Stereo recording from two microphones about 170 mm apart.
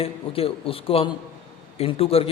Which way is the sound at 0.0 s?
35° left (ahead or behind).